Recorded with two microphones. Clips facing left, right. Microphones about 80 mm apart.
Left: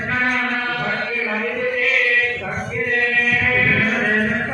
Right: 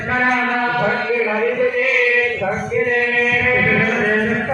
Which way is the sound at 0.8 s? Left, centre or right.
Right.